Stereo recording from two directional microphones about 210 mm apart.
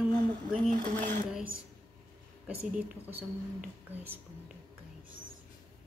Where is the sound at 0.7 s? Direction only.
40° right (ahead or behind).